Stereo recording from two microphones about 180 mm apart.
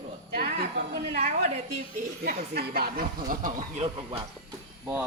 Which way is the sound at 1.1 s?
60° right (ahead or behind).